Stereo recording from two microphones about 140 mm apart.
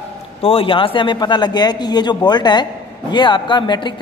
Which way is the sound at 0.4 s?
40° left (ahead or behind).